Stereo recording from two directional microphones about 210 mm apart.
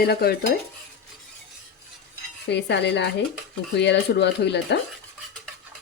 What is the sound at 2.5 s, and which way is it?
Speech, 55° left (ahead or behind).